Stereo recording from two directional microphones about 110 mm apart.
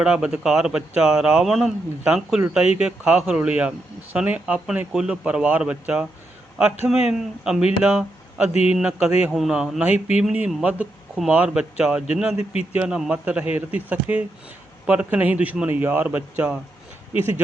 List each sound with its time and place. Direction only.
0.0 s speech: 10° right (ahead or behind)
8.5 s speech: 70° left (ahead or behind)
8.8 s speech: 10° right (ahead or behind)